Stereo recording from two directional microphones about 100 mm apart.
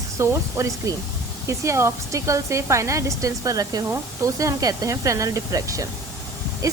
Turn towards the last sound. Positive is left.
turn(degrees=-35)  # may be behind; listen again after turning